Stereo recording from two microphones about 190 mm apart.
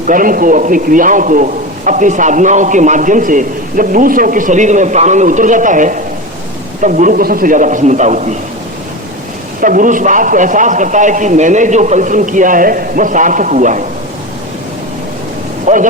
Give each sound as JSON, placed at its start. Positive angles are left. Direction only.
{"t": 0.1, "sound": "a man's voice", "side_deg": -45}
{"t": 9.6, "sound": "a man's voice", "side_deg": -45}
{"t": 15.6, "sound": "speech", "side_deg": -40}